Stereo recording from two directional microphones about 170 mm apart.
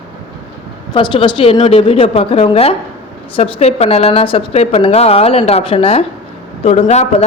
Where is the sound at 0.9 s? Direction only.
30° left (ahead or behind).